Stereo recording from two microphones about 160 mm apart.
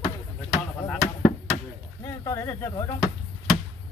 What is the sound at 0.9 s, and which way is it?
Speech, 10° left (ahead or behind).